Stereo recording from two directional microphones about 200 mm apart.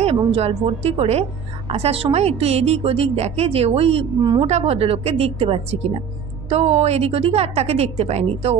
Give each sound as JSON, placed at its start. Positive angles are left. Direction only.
{"t": 0.0, "sound": "a woman's voice", "side_deg": -30}